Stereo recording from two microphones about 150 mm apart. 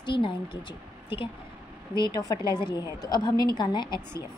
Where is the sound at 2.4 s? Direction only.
20° right (ahead or behind).